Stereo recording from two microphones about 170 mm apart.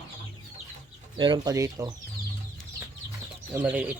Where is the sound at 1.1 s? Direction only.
25° right (ahead or behind).